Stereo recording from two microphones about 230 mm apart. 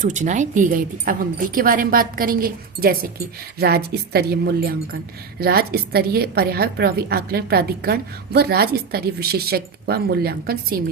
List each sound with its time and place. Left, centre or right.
0.0 s a woman's voice: right